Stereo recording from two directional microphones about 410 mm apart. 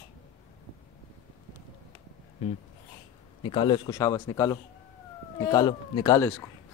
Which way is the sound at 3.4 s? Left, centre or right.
Centre.